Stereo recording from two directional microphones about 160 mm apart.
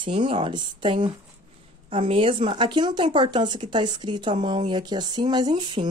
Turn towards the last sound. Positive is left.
turn(degrees=-30)  # may be behind; listen again after turning